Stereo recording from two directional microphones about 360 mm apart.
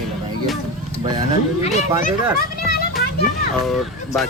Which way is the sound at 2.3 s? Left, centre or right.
Left.